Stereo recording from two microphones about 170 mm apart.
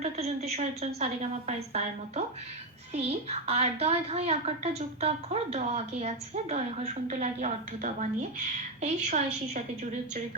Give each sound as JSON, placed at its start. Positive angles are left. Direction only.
{"t": 0.0, "sound": "a woman's voice", "side_deg": -40}